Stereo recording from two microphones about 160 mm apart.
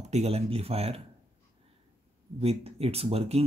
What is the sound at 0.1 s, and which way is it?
Speech, 40° right (ahead or behind).